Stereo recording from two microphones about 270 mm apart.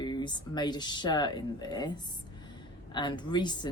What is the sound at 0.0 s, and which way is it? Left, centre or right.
Speech, centre.